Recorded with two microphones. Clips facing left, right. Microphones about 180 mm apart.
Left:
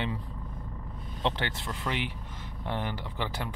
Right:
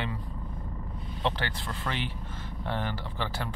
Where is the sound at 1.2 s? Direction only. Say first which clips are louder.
Even; 20° left (ahead or behind).